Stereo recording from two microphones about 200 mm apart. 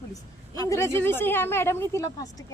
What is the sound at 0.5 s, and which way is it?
Speech, 15° left (ahead or behind).